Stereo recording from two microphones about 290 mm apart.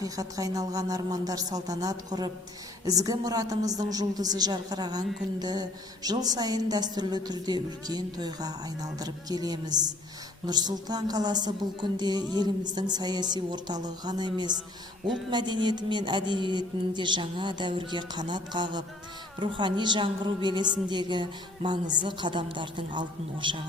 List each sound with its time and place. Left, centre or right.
0.0 s a woman's voice: centre